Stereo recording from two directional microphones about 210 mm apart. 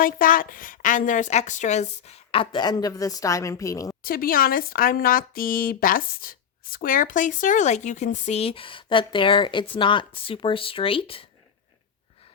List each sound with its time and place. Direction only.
0.0 s speech: 40° left (ahead or behind); by 3.9 s 15° left (ahead or behind)
4.0 s speech: 45° left (ahead or behind); by 11.3 s 25° left (ahead or behind)